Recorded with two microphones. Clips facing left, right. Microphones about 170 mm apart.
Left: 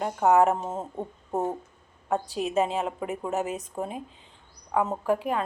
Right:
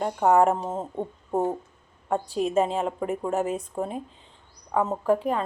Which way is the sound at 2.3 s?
5° left (ahead or behind).